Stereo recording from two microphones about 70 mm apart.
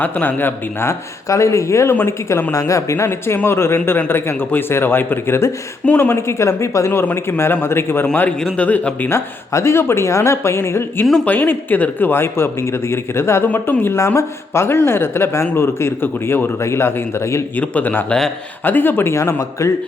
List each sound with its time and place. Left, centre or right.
0.0 s speech: left
5.8 s speech: left
6.1 s speech: left
7.0 s speech: left
8.5 s speech: centre
9.0 s speech: left
11.3 s speech: left
17.6 s speech: left
19.1 s a man's voice: left